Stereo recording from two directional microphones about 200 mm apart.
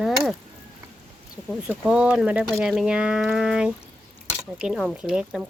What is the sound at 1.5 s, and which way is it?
Speech, 5° right (ahead or behind).